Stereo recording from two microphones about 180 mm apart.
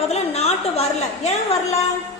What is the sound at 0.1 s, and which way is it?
A woman's voice, 35° left (ahead or behind).